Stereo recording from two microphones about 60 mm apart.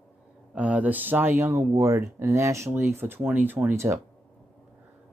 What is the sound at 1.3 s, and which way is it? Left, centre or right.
Speech, right.